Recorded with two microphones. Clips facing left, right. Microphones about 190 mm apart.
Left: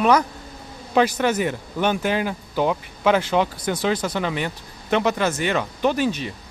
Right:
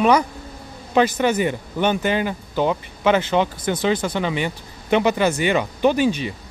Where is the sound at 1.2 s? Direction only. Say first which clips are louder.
Right 2 dB; 5° left (ahead or behind).